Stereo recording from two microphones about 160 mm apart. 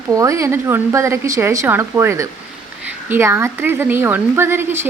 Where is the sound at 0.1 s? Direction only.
20° right (ahead or behind).